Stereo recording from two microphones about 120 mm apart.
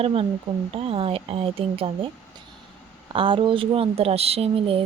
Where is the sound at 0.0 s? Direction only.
55° right (ahead or behind).